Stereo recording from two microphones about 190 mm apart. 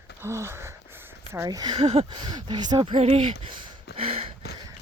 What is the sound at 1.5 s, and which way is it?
Speech, 20° right (ahead or behind).